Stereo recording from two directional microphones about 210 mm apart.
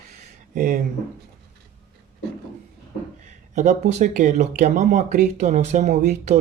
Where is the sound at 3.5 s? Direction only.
35° right (ahead or behind).